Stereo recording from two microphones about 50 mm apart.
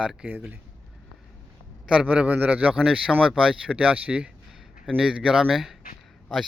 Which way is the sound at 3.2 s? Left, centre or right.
Centre.